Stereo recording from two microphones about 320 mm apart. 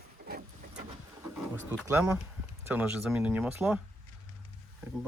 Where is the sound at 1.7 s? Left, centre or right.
Centre.